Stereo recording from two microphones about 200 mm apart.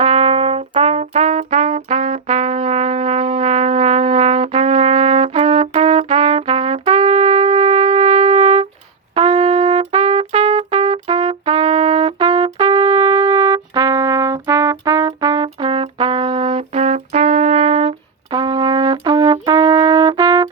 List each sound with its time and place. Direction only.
0.0 s trumpet: 35° right (ahead or behind)
18.3 s brass instrument: 20° right (ahead or behind)